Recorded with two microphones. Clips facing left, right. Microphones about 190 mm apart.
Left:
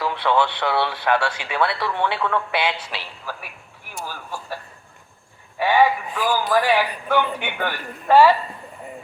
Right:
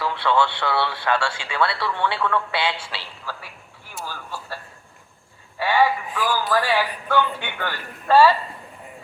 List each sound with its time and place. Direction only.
0.0 s speech: 15° left (ahead or behind)
2.9 s a sound: 15° left (ahead or behind)
4.0 s speech: 15° left (ahead or behind)